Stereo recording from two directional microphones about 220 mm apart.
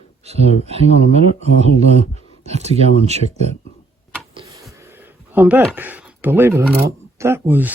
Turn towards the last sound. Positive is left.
turn(degrees=-10)  # may be behind; listen again after turning